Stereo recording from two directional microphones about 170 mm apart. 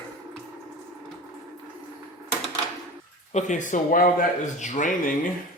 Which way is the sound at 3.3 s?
45° left (ahead or behind).